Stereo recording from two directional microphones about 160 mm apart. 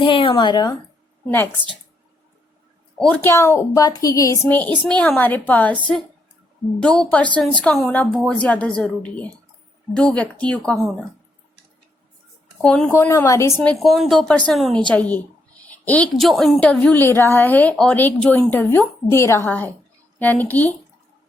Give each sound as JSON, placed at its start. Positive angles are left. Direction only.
{"t": 0.0, "sound": "speech", "side_deg": 30}
{"t": 3.0, "sound": "a woman's voice", "side_deg": 10}
{"t": 6.7, "sound": "a woman's voice", "side_deg": 5}
{"t": 12.6, "sound": "a woman's voice", "side_deg": 5}
{"t": 13.6, "sound": "a woman's voice", "side_deg": 0}